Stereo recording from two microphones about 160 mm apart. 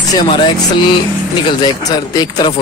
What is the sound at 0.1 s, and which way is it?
Speech, 30° left (ahead or behind).